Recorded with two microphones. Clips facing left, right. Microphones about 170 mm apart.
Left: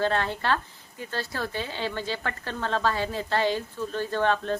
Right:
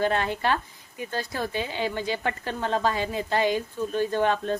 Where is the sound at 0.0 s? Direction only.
15° right (ahead or behind).